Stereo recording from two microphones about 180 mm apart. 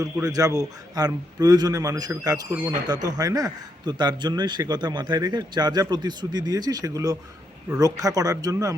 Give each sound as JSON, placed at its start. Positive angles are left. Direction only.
{"t": 0.0, "sound": "a man's voice", "side_deg": -20}